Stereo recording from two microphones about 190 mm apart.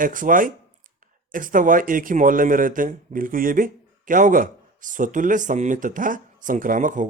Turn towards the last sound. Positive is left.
turn(degrees=-45)  # may be behind; listen again after turning